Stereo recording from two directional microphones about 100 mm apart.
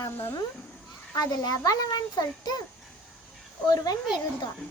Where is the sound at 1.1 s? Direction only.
40° left (ahead or behind).